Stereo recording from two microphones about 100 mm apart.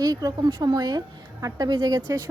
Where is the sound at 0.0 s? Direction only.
40° right (ahead or behind).